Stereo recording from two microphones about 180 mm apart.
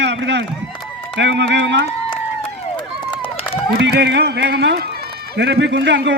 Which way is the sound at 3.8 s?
75° right (ahead or behind).